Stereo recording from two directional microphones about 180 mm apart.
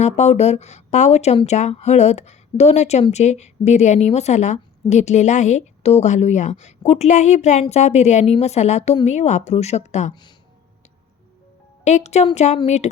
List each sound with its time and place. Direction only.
0.0 s speech: 40° left (ahead or behind)
11.9 s speech: 40° left (ahead or behind)